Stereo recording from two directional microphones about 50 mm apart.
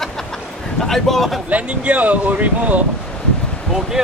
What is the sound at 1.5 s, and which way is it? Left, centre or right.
Speech, right.